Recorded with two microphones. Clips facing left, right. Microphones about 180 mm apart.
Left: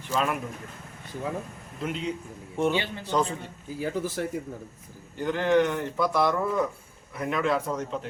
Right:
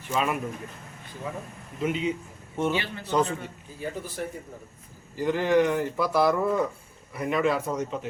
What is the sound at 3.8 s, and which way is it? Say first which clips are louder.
Speech: left 4 dB; 90° left.